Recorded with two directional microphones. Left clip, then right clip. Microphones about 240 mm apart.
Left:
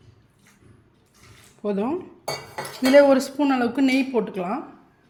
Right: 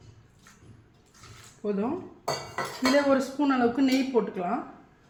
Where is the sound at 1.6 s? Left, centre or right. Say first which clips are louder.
Left 4 dB; left.